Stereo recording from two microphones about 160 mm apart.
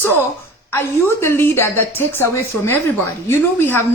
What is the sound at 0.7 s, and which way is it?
Speech, 15° left (ahead or behind).